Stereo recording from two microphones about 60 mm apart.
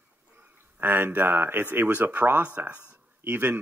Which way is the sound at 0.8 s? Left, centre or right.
Right.